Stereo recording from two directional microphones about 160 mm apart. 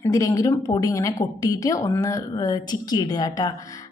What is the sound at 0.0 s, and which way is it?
A woman's voice, 20° left (ahead or behind).